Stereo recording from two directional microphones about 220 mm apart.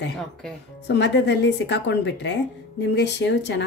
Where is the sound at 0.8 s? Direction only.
50° left (ahead or behind).